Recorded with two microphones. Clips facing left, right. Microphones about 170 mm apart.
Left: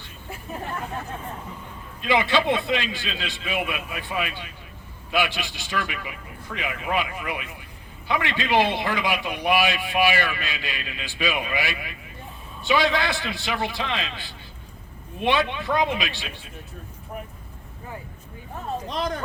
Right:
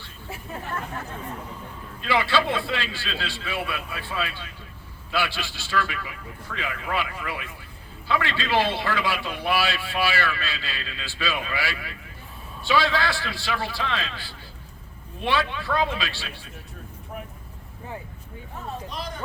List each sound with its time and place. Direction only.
2.0 s a man's voice: 20° left (ahead or behind)
18.9 s speech: 75° left (ahead or behind)